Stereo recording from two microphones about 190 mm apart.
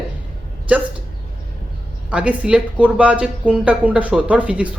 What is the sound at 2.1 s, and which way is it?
Speech, 5° right (ahead or behind).